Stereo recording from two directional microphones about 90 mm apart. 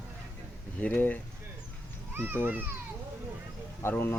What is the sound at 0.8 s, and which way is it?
Speech, 20° left (ahead or behind).